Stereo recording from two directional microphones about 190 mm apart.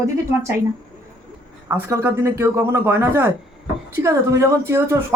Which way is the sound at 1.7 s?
10° right (ahead or behind).